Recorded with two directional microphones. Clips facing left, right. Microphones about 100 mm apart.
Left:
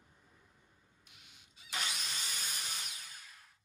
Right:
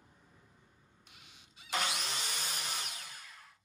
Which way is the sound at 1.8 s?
65° right (ahead or behind).